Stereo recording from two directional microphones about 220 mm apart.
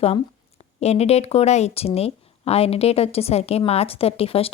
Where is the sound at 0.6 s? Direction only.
30° left (ahead or behind).